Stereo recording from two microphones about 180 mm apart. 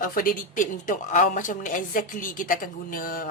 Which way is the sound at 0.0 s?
50° left (ahead or behind).